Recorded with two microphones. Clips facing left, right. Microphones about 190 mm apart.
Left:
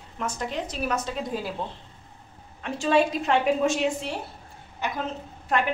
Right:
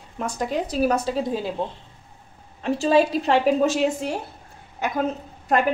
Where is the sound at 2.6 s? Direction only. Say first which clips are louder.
Right 4 dB; 35° right (ahead or behind).